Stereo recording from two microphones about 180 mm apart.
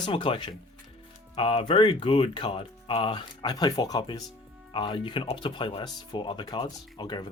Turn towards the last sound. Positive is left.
turn(degrees=25)  # may be behind; listen again after turning